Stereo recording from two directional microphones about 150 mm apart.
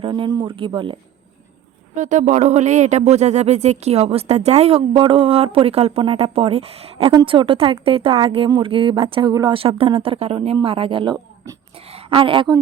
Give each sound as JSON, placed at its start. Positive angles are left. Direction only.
{"t": 0.0, "sound": "speech", "side_deg": -30}
{"t": 2.0, "sound": "speech", "side_deg": -55}
{"t": 7.1, "sound": "a woman's voice", "side_deg": -30}